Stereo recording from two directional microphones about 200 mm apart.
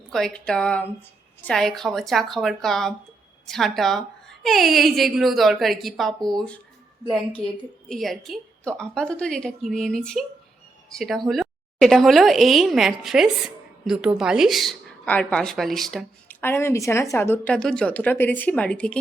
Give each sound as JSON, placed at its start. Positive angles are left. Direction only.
{"t": 0.1, "sound": "a woman's voice", "side_deg": 0}